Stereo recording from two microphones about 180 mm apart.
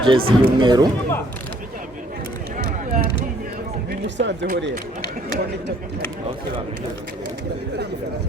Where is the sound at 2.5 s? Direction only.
45° right (ahead or behind).